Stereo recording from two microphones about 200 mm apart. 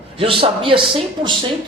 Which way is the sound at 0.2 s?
25° right (ahead or behind).